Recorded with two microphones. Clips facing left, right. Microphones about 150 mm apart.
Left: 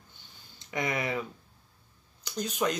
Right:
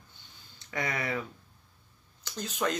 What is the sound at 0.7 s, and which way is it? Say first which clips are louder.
Speech: left 2 dB; 20° left (ahead or behind).